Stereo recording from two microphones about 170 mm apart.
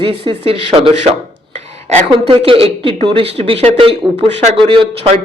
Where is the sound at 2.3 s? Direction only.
35° right (ahead or behind).